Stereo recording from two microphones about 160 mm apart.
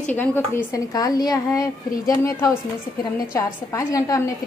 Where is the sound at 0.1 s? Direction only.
10° left (ahead or behind).